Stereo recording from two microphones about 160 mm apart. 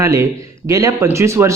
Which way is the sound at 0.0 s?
20° right (ahead or behind).